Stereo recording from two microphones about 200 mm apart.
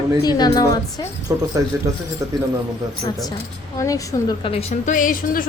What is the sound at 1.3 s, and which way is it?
Speech, 15° right (ahead or behind).